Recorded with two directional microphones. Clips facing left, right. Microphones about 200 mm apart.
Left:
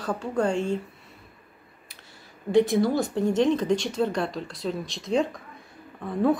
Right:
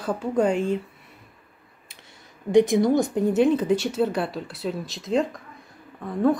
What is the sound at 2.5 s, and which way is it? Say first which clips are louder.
Speech: right 3 dB; 20° right (ahead or behind).